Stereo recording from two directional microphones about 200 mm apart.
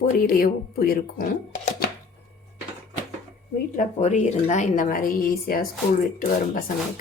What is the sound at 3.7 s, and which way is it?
A woman's voice, 40° left (ahead or behind).